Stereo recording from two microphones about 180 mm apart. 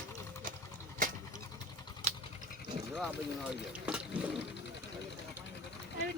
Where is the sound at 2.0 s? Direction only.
35° right (ahead or behind).